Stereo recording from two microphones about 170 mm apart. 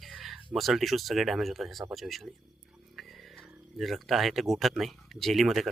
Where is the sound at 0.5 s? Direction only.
Centre (ahead or behind).